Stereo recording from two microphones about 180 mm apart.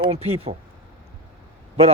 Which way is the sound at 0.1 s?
35° right (ahead or behind).